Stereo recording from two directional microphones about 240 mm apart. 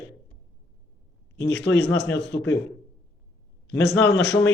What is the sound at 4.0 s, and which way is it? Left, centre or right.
Speech, left.